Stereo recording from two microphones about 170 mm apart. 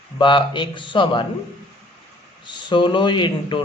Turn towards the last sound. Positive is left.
turn(degrees=30)  # may be behind; listen again after turning